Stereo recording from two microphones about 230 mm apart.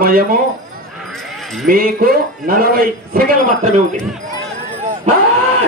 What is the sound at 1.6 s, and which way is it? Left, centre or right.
Speech, right.